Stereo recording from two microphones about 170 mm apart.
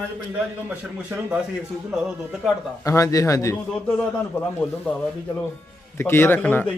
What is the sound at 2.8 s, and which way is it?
Speech, 20° left (ahead or behind).